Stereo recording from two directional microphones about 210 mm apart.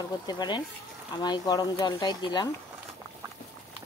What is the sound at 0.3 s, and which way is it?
Speech, 20° left (ahead or behind).